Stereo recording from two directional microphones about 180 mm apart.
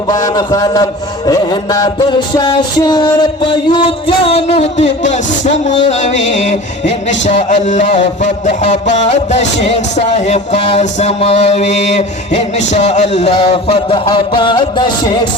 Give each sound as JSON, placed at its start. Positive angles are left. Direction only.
{"t": 0.1, "sound": "music", "side_deg": 20}
{"t": 5.7, "sound": "mantra", "side_deg": 40}
{"t": 14.0, "sound": "music", "side_deg": 25}